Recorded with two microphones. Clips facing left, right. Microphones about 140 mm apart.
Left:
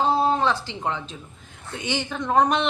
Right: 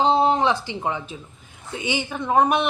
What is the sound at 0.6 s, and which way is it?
Speech, 10° right (ahead or behind).